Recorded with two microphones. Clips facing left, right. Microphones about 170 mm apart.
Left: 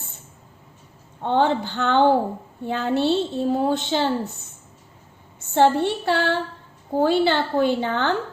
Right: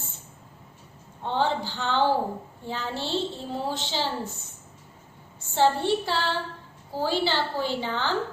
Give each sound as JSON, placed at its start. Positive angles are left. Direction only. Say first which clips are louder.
{"t": 1.2, "sound": "a woman's voice", "louder": "left 6 dB", "side_deg": 55}
{"t": 5.5, "sound": "a woman's voice", "louder": "left 4 dB", "side_deg": 60}